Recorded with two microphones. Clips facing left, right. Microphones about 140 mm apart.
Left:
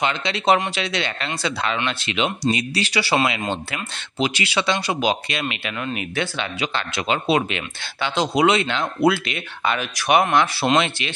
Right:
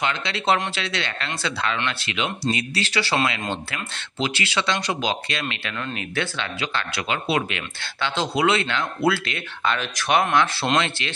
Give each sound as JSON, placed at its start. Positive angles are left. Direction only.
{"t": 0.0, "sound": "speech", "side_deg": 20}